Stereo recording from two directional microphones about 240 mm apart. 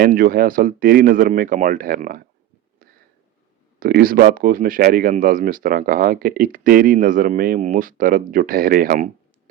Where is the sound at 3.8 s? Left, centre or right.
Right.